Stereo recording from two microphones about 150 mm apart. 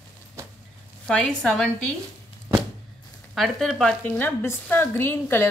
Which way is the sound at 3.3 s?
Centre (ahead or behind).